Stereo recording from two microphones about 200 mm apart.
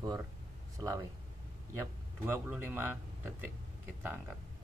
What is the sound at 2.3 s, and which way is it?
Speech, 10° right (ahead or behind).